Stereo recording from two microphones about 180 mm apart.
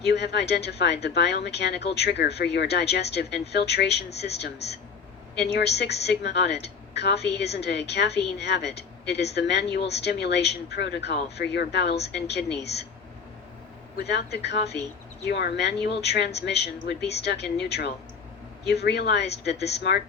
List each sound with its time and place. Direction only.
0.0 s a woman's voice: 70° left (ahead or behind)
14.0 s a woman's voice: 65° left (ahead or behind)